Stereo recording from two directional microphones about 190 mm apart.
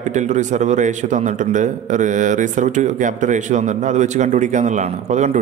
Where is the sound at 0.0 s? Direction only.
40° right (ahead or behind).